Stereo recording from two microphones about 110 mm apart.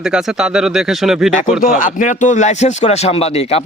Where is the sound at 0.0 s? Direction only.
5° right (ahead or behind).